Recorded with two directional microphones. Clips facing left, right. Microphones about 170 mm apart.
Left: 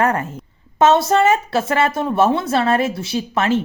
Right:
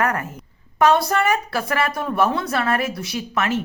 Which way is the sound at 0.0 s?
25° left (ahead or behind).